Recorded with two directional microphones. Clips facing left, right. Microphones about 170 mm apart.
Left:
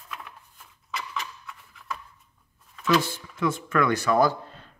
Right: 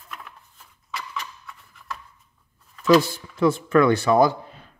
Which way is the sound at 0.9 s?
Centre (ahead or behind).